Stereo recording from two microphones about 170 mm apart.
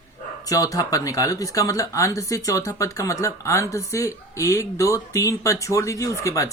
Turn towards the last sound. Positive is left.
turn(degrees=20)  # may be behind; listen again after turning